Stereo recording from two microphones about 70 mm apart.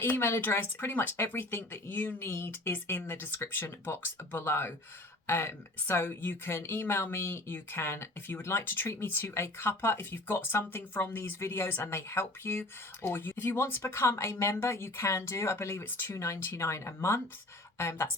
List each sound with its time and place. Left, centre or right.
0.0 s speech: left
16.1 s speech: left